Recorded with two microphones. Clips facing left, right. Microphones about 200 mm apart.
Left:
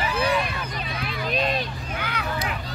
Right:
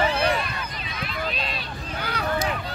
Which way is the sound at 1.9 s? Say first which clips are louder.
Right 3 dB; 35° right (ahead or behind).